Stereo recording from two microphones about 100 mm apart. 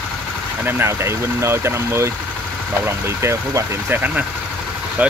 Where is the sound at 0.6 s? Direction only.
25° right (ahead or behind).